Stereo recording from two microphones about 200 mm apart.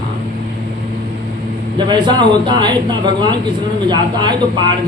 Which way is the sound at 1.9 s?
25° right (ahead or behind).